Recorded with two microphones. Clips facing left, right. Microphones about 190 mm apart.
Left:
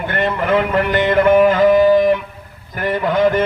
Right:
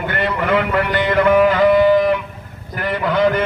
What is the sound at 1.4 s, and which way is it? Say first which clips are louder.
Music: left 1 dB; 45° left (ahead or behind).